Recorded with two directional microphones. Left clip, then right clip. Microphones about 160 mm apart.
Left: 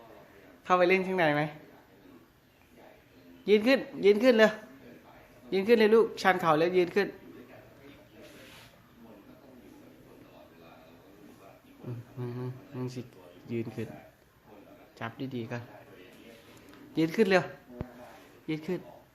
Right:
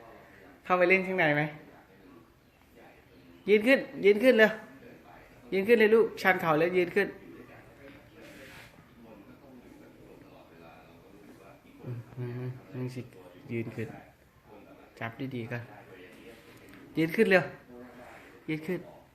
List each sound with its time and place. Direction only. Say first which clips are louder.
0.6 s speech: even; 15° left (ahead or behind)
3.4 s speech: right 1 dB; 20° left (ahead or behind)
12.2 s a sound: left 1 dB; 20° left (ahead or behind)
13.5 s speech: even; 20° left (ahead or behind)
14.9 s speech: even; 20° left (ahead or behind)
16.9 s speech: right 1 dB; 15° left (ahead or behind)
18.4 s speech: even; 15° left (ahead or behind)